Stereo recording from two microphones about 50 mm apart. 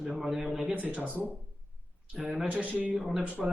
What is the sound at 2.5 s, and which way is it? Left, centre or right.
Speech, right.